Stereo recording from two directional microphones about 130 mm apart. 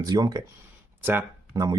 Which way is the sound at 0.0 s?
30° right (ahead or behind).